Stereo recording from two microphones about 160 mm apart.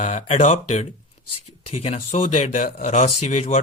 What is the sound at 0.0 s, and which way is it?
Speech, 45° left (ahead or behind).